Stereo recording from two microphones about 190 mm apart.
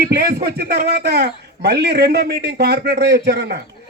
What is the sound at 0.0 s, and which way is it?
Speech, 50° right (ahead or behind).